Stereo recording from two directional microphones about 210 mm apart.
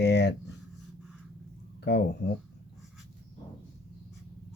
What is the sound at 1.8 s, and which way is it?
Speech, 55° left (ahead or behind).